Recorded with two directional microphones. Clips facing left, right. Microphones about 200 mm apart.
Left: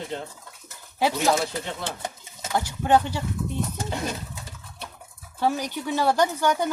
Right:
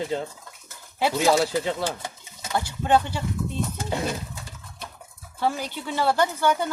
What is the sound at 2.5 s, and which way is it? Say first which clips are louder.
Speech: left 1 dB; 15° left (ahead or behind).